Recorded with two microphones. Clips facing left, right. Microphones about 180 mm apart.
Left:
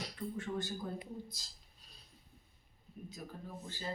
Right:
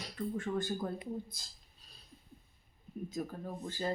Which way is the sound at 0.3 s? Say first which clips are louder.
Right 5 dB; 50° right (ahead or behind).